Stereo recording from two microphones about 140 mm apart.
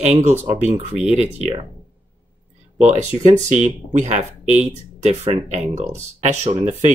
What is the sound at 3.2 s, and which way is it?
Speech, 60° right (ahead or behind).